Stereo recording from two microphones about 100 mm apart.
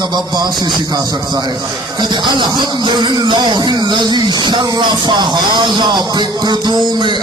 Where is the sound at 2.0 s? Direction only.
50° right (ahead or behind).